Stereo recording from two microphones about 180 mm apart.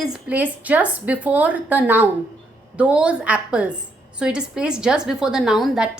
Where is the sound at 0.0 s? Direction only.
5° right (ahead or behind).